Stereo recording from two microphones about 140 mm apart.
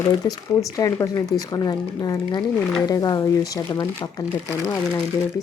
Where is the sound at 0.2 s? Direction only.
30° left (ahead or behind).